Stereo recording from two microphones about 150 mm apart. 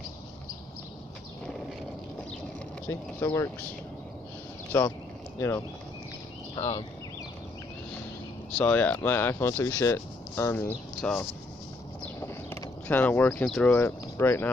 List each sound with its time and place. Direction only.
2.9 s speech: 15° left (ahead or behind)
4.7 s speech: 15° left (ahead or behind)
8.5 s speech: 10° left (ahead or behind)
11.0 s speech: 5° left (ahead or behind)
12.0 s a sound: 15° left (ahead or behind)
13.5 s speech: 10° left (ahead or behind)